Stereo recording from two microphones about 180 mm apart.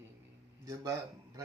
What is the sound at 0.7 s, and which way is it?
Speech, 15° right (ahead or behind).